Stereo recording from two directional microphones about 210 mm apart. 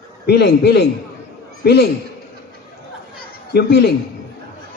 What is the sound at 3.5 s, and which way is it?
Speech, 50° left (ahead or behind).